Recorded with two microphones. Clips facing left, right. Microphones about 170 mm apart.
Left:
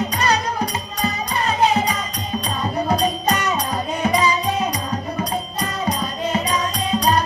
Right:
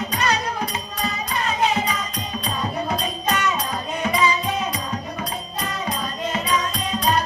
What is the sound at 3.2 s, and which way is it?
Music, 40° left (ahead or behind).